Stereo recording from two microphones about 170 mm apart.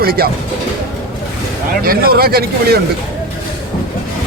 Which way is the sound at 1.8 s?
60° right (ahead or behind).